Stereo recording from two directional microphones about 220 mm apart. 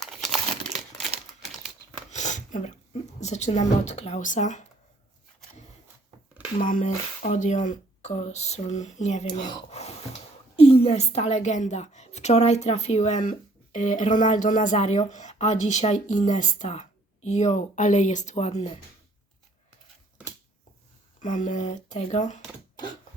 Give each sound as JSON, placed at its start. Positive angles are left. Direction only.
{"t": 0.0, "sound": "crumpling", "side_deg": 0}
{"t": 2.0, "sound": "speech", "side_deg": 35}
{"t": 6.6, "sound": "speech", "side_deg": 35}
{"t": 9.5, "sound": "a sound", "side_deg": 30}
{"t": 10.6, "sound": "a woman's voice", "side_deg": 25}
{"t": 21.2, "sound": "speech", "side_deg": 35}